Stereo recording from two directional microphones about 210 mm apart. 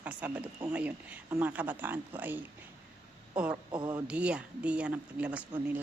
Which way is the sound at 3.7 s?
20° right (ahead or behind).